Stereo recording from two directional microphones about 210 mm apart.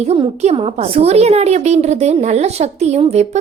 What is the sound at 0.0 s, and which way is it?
A woman's voice, 30° right (ahead or behind).